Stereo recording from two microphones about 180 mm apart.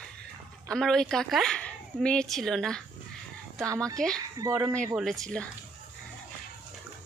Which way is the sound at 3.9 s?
5° left (ahead or behind).